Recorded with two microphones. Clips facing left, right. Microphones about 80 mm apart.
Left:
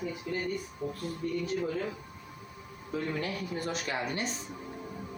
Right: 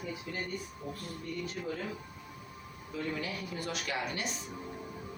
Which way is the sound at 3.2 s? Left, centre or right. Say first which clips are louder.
Left 4 dB; left.